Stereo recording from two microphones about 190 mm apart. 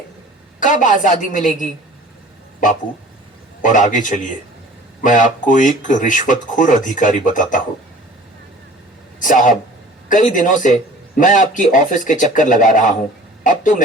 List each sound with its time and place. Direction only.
0.6 s speech: 45° left (ahead or behind)
3.6 s speech: 40° left (ahead or behind)
9.2 s a man's voice: 40° left (ahead or behind)